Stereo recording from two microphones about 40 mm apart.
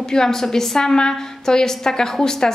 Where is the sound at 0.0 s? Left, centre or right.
Centre.